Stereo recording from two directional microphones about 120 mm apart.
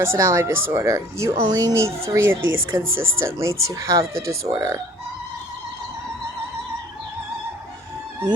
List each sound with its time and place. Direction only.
0.0 s speech: 25° right (ahead or behind)